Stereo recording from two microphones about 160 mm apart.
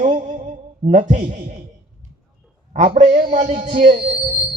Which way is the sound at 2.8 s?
40° right (ahead or behind).